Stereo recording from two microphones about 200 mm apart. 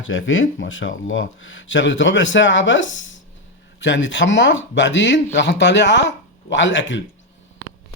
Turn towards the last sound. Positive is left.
turn(degrees=65)  # may be behind; listen again after turning